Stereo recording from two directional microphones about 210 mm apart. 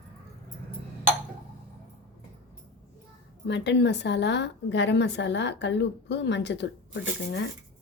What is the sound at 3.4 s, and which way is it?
A woman's voice, 55° left (ahead or behind).